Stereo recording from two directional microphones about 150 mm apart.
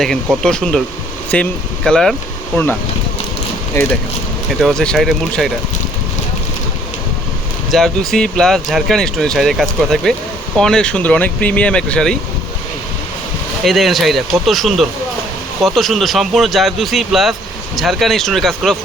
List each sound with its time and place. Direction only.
0.4 s speech: 5° left (ahead or behind)
3.8 s speech: 20° left (ahead or behind)
4.6 s speech: 5° left (ahead or behind)
7.7 s speech: centre (ahead or behind)
13.7 s speech: centre (ahead or behind)